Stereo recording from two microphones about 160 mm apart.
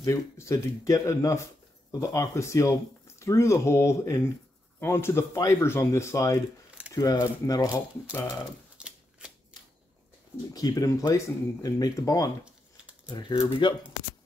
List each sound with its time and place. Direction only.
0.0 s speech: 15° left (ahead or behind)
8.7 s typewriter: 5° right (ahead or behind)
10.5 s speech: 25° left (ahead or behind)
13.0 s speech: 30° left (ahead or behind)